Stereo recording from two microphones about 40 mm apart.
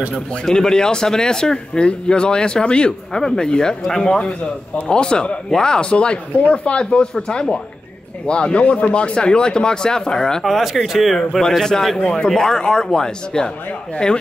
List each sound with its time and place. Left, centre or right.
0.5 s speech: centre
10.4 s speech: centre
12.0 s speech: left